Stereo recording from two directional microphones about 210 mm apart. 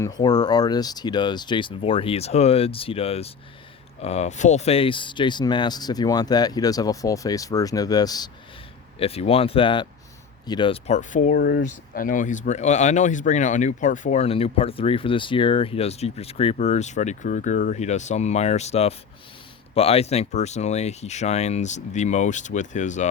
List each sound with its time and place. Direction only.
0.0 s speech: 20° left (ahead or behind); by 23.0 s 35° left (ahead or behind)